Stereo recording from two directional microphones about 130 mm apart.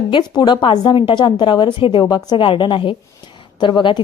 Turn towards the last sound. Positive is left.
turn(degrees=35)  # may be behind; listen again after turning